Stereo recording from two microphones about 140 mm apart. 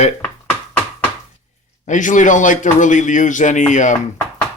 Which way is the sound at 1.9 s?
65° left (ahead or behind).